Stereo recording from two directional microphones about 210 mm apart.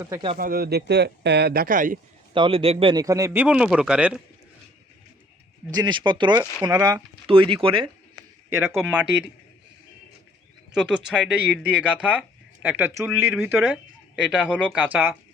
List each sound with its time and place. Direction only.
0.0 s a man's voice: 15° right (ahead or behind)
0.3 s speech: 45° right (ahead or behind)
2.3 s a man's voice: 25° right (ahead or behind); by 4.2 s 5° right (ahead or behind)
5.7 s speech: 20° right (ahead or behind)
8.5 s a man's voice: 10° right (ahead or behind)
10.8 s a man's voice: 5° right (ahead or behind)